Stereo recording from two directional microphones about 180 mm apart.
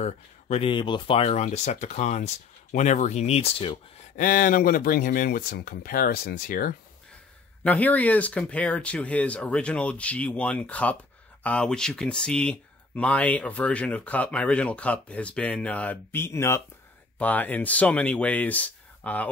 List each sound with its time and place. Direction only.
0.0 s speech: 35° left (ahead or behind)
4.2 s speech: 50° left (ahead or behind)
7.6 s speech: 10° left (ahead or behind)